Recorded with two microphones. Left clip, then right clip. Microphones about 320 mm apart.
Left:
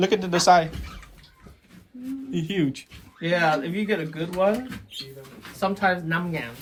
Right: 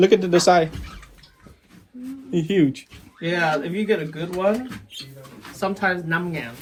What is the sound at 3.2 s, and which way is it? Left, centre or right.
Speech, left.